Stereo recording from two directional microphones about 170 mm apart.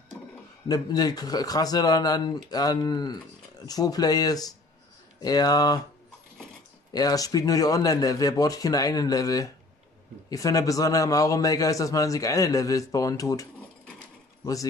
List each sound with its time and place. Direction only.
0.7 s a man's voice: 25° left (ahead or behind)
6.9 s a man's voice: 20° left (ahead or behind)